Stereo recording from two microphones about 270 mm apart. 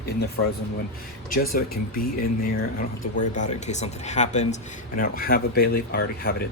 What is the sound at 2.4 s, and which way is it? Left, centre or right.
Speech, left.